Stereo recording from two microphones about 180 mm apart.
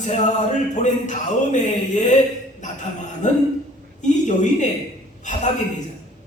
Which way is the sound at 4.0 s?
40° left (ahead or behind).